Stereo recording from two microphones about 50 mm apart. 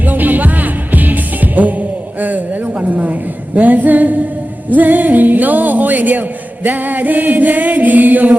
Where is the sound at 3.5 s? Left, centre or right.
Right.